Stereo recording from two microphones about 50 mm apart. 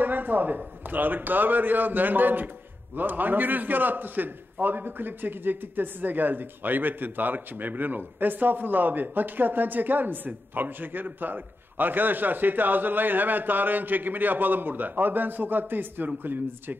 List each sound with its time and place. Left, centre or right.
0.0 s a man's voice: right